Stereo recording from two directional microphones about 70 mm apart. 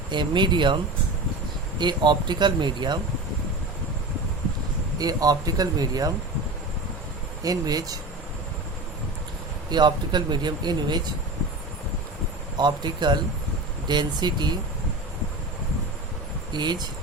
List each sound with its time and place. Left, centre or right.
0.1 s speech: right
1.8 s speech: right
4.9 s speech: right
7.4 s speech: right
9.6 s speech: right
12.5 s speech: right
16.5 s speech: right